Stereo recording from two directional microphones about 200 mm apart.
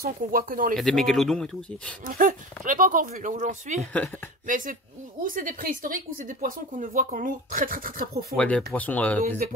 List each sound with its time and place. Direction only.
0.0 s speech: 45° right (ahead or behind)
0.7 s speech: centre (ahead or behind)
2.0 s speech: 40° right (ahead or behind)
8.4 s speech: 5° left (ahead or behind)